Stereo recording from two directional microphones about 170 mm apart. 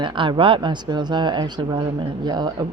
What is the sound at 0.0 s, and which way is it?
Speech, 30° right (ahead or behind).